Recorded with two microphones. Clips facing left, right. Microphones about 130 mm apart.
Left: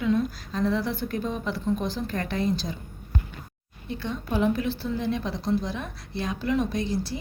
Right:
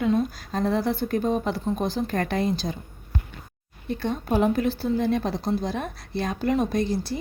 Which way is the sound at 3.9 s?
50° right (ahead or behind).